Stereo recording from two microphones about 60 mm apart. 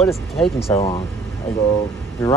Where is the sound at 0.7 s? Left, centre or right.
Left.